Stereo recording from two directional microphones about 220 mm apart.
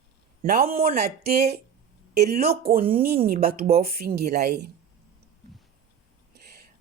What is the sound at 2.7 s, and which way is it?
A woman's voice, 40° right (ahead or behind).